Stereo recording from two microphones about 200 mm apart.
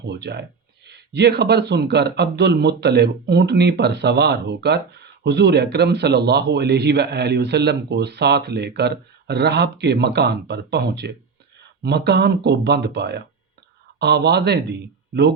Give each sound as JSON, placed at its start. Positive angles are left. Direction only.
{"t": 0.1, "sound": "speech", "side_deg": -60}